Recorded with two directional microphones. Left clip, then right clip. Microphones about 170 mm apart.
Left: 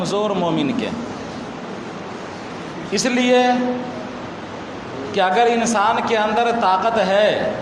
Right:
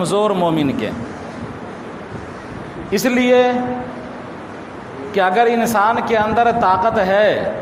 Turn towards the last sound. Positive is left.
turn(degrees=-45)  # may be behind; listen again after turning